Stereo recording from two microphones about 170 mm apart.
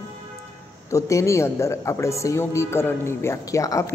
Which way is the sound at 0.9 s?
15° left (ahead or behind).